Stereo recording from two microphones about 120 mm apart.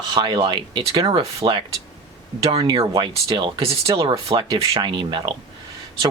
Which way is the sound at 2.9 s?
45° right (ahead or behind).